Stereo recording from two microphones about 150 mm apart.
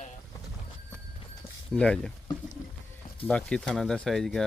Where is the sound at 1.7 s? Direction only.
5° left (ahead or behind).